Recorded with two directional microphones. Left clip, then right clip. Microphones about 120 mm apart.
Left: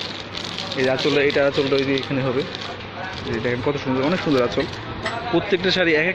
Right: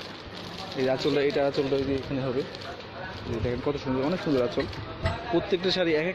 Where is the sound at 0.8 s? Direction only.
35° right (ahead or behind).